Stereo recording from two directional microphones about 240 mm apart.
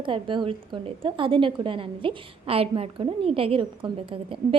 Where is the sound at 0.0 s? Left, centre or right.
Right.